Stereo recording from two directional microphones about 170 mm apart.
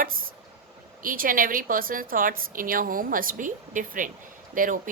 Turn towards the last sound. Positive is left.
turn(degrees=-50)  # may be behind; listen again after turning